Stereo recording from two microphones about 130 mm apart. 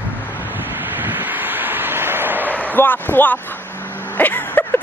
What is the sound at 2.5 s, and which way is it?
Speech, 15° left (ahead or behind).